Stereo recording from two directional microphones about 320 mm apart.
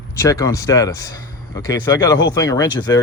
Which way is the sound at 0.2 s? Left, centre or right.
Centre.